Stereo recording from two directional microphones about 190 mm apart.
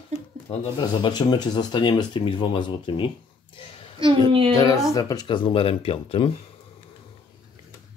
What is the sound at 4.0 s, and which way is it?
Speech, 25° right (ahead or behind).